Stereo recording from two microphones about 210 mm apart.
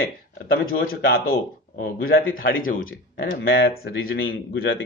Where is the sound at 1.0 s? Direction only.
70° left (ahead or behind).